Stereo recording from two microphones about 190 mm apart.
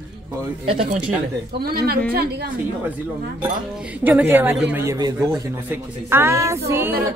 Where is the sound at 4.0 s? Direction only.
10° right (ahead or behind).